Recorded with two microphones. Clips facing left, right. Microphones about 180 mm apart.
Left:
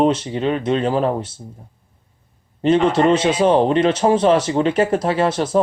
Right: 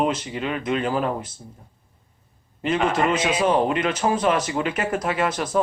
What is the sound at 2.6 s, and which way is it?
Speech, 30° left (ahead or behind).